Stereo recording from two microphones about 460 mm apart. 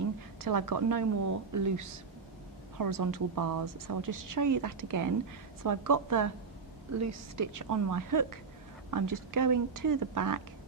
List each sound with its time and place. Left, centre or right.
0.4 s a woman's voice: right